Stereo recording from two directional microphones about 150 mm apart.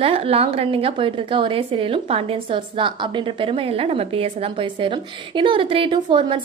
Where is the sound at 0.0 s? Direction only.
40° right (ahead or behind).